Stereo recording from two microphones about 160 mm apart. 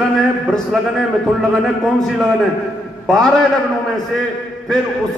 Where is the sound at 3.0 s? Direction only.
5° left (ahead or behind).